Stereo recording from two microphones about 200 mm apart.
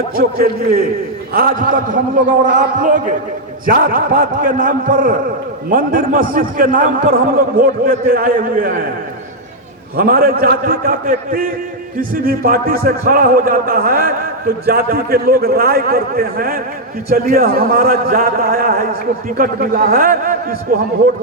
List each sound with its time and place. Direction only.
0.2 s a man's voice: 45° right (ahead or behind)
10.0 s a man's voice: 50° right (ahead or behind)